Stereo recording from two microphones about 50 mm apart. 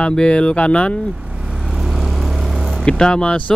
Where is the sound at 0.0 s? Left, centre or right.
Centre.